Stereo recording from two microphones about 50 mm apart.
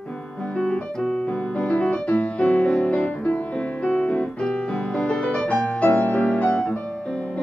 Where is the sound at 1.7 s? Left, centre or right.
Left.